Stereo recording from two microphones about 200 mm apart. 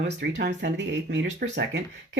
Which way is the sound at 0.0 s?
60° right (ahead or behind).